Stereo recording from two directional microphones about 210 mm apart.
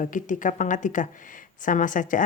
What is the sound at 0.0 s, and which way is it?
Speech, 40° left (ahead or behind).